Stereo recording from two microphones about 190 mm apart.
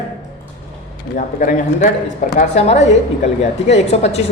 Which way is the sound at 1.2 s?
45° left (ahead or behind).